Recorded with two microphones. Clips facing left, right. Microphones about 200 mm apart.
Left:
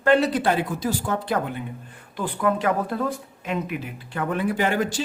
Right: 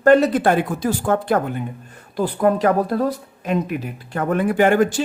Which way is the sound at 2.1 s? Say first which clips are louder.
Right 6 dB; 40° right (ahead or behind).